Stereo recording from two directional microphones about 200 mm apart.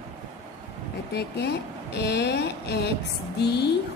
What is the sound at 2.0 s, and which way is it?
Speech, 55° left (ahead or behind).